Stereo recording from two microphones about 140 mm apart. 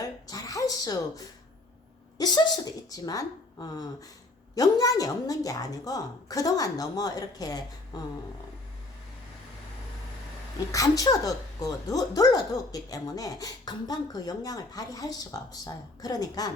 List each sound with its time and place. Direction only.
0.0 s a sound: 25° left (ahead or behind)
2.1 s speech: 30° left (ahead or behind)
10.7 s speech: 25° left (ahead or behind)